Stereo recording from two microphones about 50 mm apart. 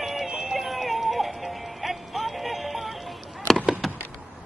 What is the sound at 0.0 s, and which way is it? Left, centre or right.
Music, centre.